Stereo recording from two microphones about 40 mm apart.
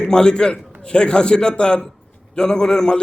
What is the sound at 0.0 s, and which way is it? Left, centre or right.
A man's voice, left.